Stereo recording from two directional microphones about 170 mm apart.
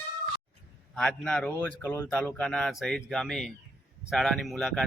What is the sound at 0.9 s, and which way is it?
A man's voice, 5° left (ahead or behind).